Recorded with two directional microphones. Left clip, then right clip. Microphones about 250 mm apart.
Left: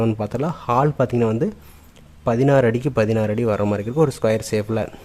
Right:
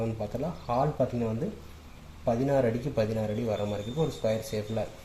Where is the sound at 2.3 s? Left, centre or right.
Left.